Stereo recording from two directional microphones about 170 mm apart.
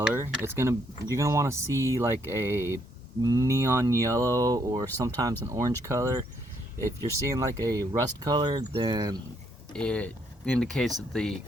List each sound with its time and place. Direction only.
0.1 s speech: 15° right (ahead or behind)
9.7 s speech: 5° left (ahead or behind)